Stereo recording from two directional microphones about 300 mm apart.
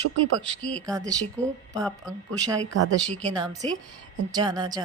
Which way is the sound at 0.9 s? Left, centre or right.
Centre.